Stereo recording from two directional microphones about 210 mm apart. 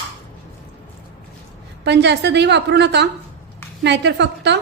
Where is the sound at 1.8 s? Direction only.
55° right (ahead or behind).